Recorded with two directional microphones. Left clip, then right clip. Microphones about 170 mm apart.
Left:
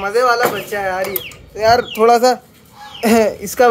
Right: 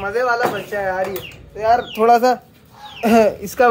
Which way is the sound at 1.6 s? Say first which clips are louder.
Left 3 dB; 60° left (ahead or behind).